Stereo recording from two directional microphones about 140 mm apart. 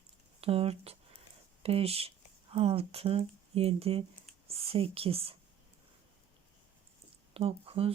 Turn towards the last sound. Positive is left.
turn(degrees=-45)  # may be behind; listen again after turning